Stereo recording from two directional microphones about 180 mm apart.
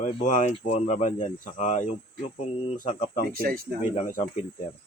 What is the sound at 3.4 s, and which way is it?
Speech, 55° right (ahead or behind).